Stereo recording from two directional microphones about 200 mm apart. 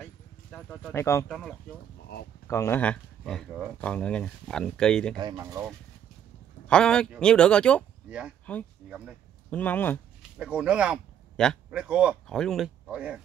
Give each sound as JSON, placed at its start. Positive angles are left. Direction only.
{"t": 0.0, "sound": "a sound", "side_deg": 5}
{"t": 1.3, "sound": "speech", "side_deg": 0}
{"t": 2.4, "sound": "speech", "side_deg": 15}
{"t": 5.1, "sound": "speech", "side_deg": -20}
{"t": 6.7, "sound": "speech", "side_deg": 5}
{"t": 10.3, "sound": "speech", "side_deg": -5}